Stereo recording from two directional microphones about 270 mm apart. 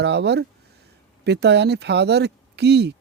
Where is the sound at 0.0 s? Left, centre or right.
Right.